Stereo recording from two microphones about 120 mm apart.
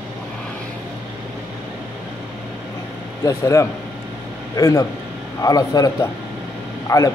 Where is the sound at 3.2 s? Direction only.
25° left (ahead or behind).